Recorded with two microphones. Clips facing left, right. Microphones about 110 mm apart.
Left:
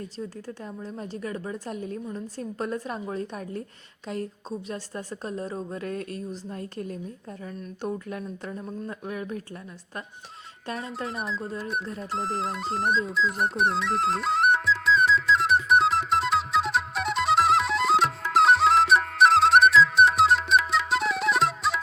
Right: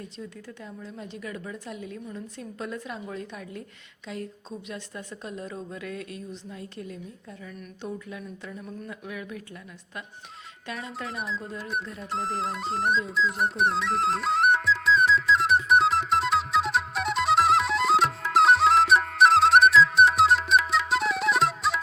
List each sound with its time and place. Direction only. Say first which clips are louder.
0.2 s a woman's voice: left 4 dB; 35° left (ahead or behind)
4.7 s a woman's voice: left 4 dB; 40° left (ahead or behind)
11.1 s speech: left 2 dB; centre (ahead or behind)
11.9 s music: even; centre (ahead or behind)